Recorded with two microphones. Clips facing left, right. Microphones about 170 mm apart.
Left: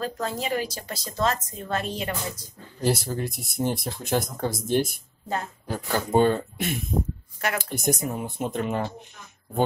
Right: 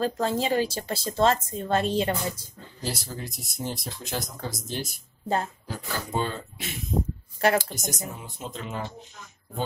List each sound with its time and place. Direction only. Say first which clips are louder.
0.0 s a woman's voice: right 4 dB; 30° right (ahead or behind)
2.8 s speech: left 9 dB; 55° left (ahead or behind)
7.3 s speech: right 6 dB; 30° right (ahead or behind)
7.7 s speech: left 8 dB; 60° left (ahead or behind)